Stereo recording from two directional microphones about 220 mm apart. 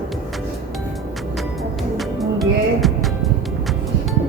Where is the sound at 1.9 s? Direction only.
Centre (ahead or behind).